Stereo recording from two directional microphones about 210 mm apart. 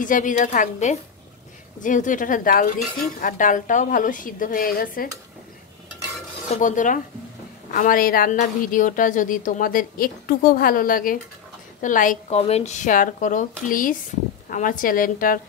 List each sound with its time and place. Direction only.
0.0 s a woman's voice: 40° left (ahead or behind)
6.5 s a woman's voice: 35° left (ahead or behind)